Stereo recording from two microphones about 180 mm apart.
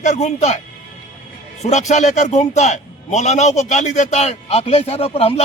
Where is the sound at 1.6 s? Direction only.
40° left (ahead or behind).